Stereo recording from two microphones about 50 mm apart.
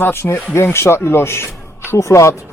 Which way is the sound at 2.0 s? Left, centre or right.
Left.